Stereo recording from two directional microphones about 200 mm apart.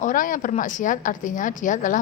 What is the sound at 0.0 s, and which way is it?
A woman's voice, 40° left (ahead or behind).